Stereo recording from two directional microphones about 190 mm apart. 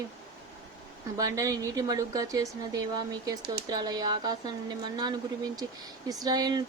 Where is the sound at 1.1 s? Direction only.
15° right (ahead or behind).